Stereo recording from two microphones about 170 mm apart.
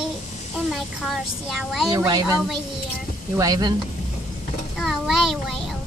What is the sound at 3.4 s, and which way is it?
Speech, 20° right (ahead or behind).